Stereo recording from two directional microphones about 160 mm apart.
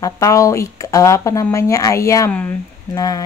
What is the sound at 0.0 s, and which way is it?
A woman's voice, 20° left (ahead or behind).